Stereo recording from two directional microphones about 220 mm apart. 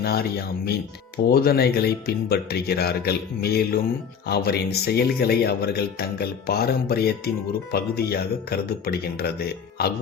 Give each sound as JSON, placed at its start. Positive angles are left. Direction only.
{"t": 0.0, "sound": "speech", "side_deg": 45}